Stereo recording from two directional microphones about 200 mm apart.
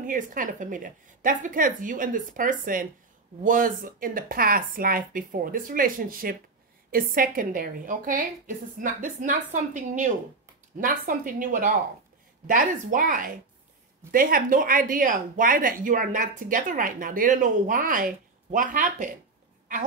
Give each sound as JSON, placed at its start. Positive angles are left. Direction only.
{"t": 0.0, "sound": "a woman's voice", "side_deg": -40}